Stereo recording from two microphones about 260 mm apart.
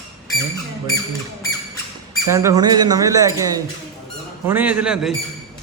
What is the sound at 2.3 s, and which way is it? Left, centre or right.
Speech, centre.